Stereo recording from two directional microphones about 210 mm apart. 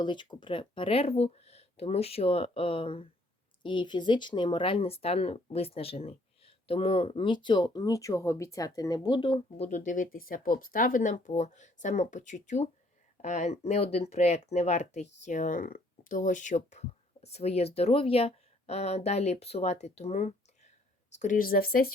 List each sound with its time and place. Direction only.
0.0 s speech: 20° left (ahead or behind)
9.6 s speech: 35° left (ahead or behind)